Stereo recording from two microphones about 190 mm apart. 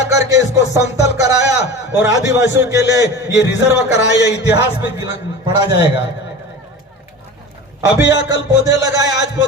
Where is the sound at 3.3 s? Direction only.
65° left (ahead or behind).